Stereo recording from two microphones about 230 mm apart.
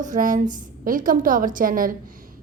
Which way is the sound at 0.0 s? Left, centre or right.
Right.